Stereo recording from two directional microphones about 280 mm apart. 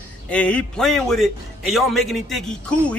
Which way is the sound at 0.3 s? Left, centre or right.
Centre.